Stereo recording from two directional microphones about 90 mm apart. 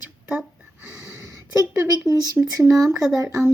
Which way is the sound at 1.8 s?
40° right (ahead or behind).